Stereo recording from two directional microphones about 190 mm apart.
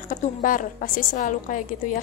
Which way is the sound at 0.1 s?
45° left (ahead or behind).